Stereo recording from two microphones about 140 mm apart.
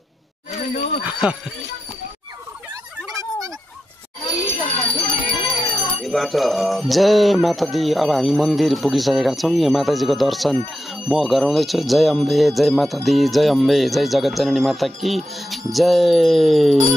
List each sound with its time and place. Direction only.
0.5 s bicycle bell: 50° left (ahead or behind)
1.2 s speech: 10° right (ahead or behind)
4.9 s bell: 35° left (ahead or behind)
6.0 s music: centre (ahead or behind)